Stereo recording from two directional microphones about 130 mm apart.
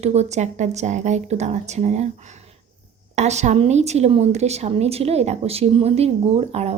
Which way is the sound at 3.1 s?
60° right (ahead or behind).